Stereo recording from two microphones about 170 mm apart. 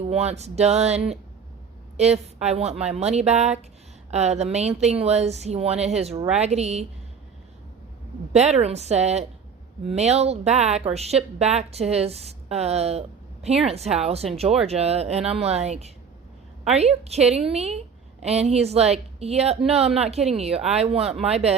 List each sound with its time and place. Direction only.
0.1 s speech: 40° right (ahead or behind)
8.3 s speech: 40° right (ahead or behind)